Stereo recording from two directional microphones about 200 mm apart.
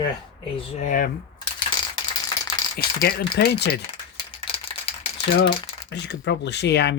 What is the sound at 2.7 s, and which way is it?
Speech, 50° left (ahead or behind).